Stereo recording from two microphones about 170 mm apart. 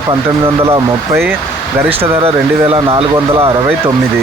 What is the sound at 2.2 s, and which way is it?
Speech, 35° right (ahead or behind).